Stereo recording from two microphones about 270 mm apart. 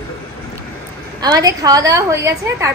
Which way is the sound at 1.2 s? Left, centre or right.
Centre.